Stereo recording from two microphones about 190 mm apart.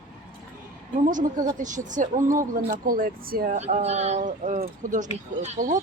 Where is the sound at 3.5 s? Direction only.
35° right (ahead or behind).